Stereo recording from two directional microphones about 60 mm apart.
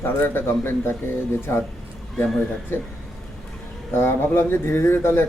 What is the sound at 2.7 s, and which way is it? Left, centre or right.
Speech, left.